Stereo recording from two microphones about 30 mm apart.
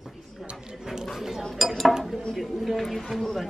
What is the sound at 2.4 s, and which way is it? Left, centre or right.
Speech, centre.